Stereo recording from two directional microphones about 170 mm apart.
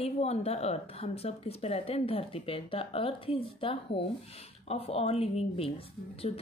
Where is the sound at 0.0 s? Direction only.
35° left (ahead or behind).